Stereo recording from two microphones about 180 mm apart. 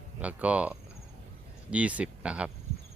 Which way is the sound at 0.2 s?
10° right (ahead or behind).